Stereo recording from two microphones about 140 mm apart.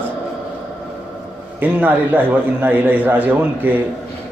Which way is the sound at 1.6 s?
10° right (ahead or behind).